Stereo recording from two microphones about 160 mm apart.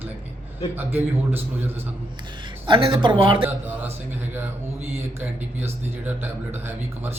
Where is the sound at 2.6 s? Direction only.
35° right (ahead or behind).